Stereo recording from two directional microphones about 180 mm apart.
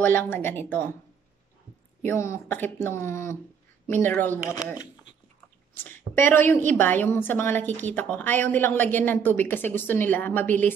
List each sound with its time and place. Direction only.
0.0 s a woman's voice: 10° left (ahead or behind)
2.0 s a woman's voice: 15° left (ahead or behind)